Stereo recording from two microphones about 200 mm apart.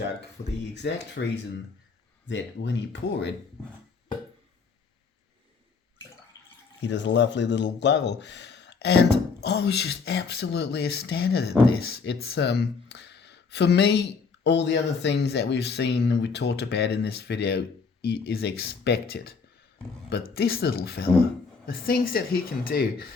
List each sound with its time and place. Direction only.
0.2 s speech: 60° left (ahead or behind)
2.2 s speech: 65° left (ahead or behind)
6.8 s speech: 60° left (ahead or behind)